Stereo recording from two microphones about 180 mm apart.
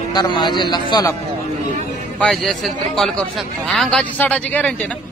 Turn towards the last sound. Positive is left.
turn(degrees=5)  # may be behind; listen again after turning